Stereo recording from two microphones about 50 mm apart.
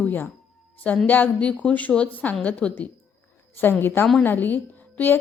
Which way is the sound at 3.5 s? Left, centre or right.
Left.